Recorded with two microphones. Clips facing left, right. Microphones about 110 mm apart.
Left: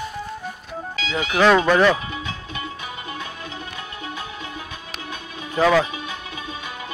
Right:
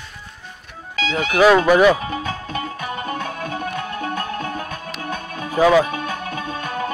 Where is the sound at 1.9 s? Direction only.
45° right (ahead or behind).